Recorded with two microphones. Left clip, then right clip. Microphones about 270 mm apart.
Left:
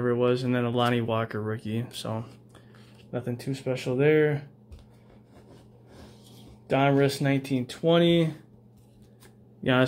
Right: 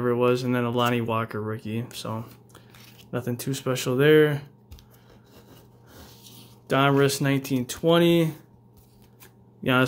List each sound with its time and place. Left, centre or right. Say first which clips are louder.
0.0 s speech: right 2 dB; centre
3.1 s speech: right 3 dB; centre
6.7 s speech: right 2 dB; centre
9.6 s speech: right 1 dB; centre